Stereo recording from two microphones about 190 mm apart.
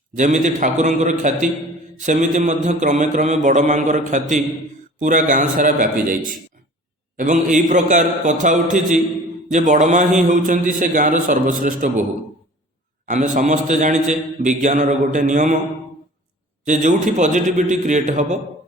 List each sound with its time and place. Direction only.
0.2 s a man's voice: 40° right (ahead or behind)
7.2 s a man's voice: 40° right (ahead or behind)
13.1 s a man's voice: 40° right (ahead or behind)
16.6 s a man's voice: 40° right (ahead or behind)